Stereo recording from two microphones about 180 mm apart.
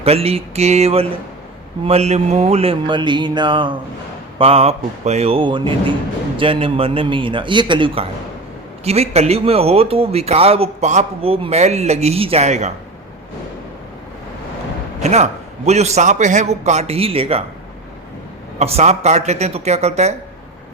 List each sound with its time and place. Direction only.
0.0 s a man's voice: 35° right (ahead or behind)
15.0 s a man's voice: 40° right (ahead or behind)
18.6 s a man's voice: 35° right (ahead or behind)